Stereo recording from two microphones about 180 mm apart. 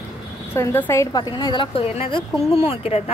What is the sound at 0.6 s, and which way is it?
A woman's voice, 15° left (ahead or behind).